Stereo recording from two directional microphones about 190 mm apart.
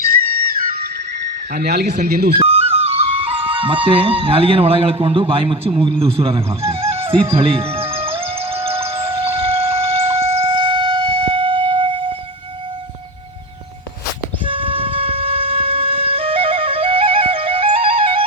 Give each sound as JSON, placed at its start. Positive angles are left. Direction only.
{"t": 1.5, "sound": "speech", "side_deg": -60}
{"t": 2.4, "sound": "speech", "side_deg": -30}
{"t": 7.3, "sound": "music", "side_deg": -30}
{"t": 14.4, "sound": "music", "side_deg": -25}